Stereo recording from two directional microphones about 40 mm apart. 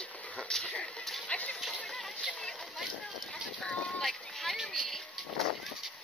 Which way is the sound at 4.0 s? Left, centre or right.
Centre.